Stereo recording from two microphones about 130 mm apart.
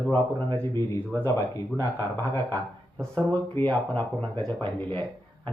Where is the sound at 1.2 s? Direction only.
25° left (ahead or behind).